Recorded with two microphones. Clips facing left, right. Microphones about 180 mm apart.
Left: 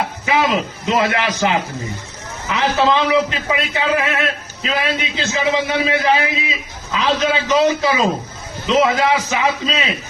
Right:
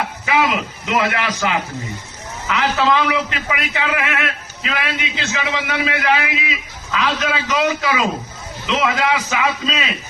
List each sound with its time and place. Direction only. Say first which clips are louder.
0.3 s a man's voice: left 1 dB; 35° left (ahead or behind)